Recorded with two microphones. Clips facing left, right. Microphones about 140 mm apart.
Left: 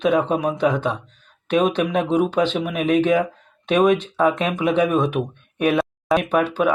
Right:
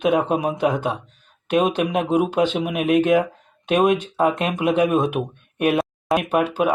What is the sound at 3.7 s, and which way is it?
Speech, 40° right (ahead or behind).